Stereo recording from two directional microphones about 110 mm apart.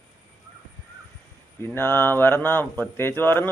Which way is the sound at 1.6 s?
15° left (ahead or behind).